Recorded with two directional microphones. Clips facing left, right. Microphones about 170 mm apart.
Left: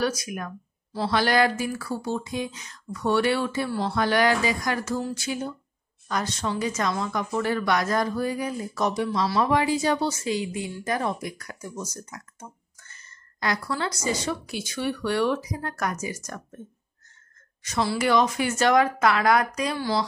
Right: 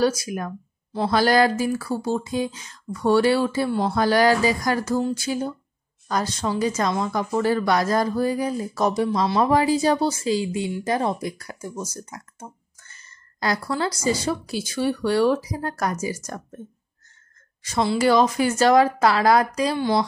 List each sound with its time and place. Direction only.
0.0 s speech: 30° right (ahead or behind)
1.0 s speech: 40° right (ahead or behind)
13.4 s speech: 35° right (ahead or behind)
17.6 s speech: 30° right (ahead or behind)